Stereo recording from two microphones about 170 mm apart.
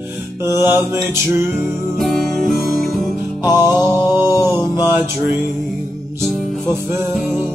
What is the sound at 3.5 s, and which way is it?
Mantra, 15° right (ahead or behind).